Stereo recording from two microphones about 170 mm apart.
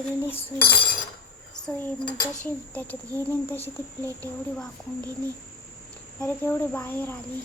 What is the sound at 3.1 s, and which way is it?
Speech, 15° right (ahead or behind).